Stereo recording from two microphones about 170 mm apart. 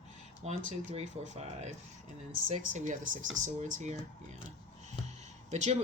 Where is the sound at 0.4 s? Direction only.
45° right (ahead or behind).